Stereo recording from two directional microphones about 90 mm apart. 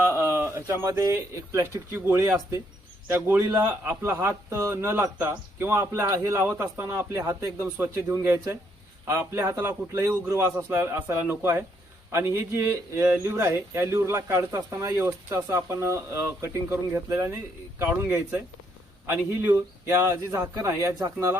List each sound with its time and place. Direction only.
0.0 s a man's voice: 30° right (ahead or behind)
20.0 s speech: 35° right (ahead or behind)